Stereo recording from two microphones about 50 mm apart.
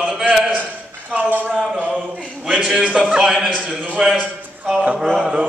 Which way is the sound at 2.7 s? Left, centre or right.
Right.